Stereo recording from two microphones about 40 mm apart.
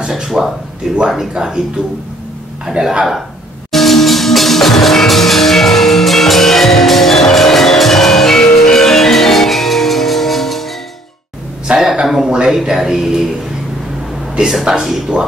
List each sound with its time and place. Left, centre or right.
0.1 s speech: centre
2.6 s speech: centre
3.7 s music: centre
11.6 s a sound: centre
12.3 s speech: centre
14.6 s speech: centre